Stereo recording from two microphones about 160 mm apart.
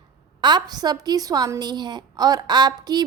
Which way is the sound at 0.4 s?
25° right (ahead or behind).